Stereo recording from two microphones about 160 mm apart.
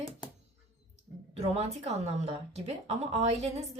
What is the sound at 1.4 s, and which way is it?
Speech, 40° right (ahead or behind).